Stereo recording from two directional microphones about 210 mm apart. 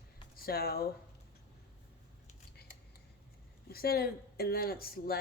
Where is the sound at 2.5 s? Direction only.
50° left (ahead or behind).